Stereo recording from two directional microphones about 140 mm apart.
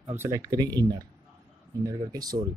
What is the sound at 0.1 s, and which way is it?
Speech, 20° right (ahead or behind).